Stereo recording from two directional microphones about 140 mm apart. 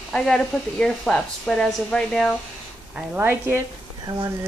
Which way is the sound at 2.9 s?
10° right (ahead or behind).